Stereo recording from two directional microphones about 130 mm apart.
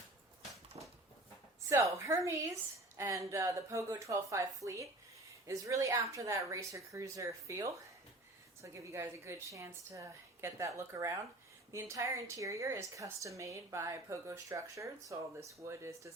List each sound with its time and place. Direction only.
0.7 s dog: 45° right (ahead or behind)
1.7 s a woman's voice: 25° right (ahead or behind)